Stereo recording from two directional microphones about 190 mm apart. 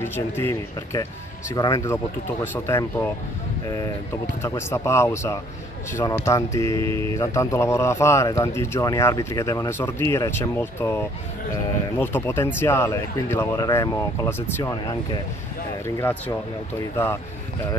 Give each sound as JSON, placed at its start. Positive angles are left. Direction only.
{"t": 0.0, "sound": "a man's voice", "side_deg": 10}